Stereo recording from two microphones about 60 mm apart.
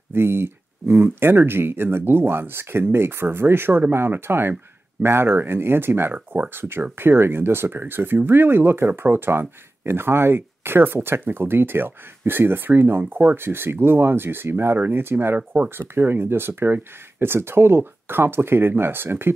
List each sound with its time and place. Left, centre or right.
0.1 s speech: right